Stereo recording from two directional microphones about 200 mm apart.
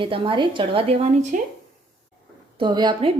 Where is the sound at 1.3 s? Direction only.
40° right (ahead or behind).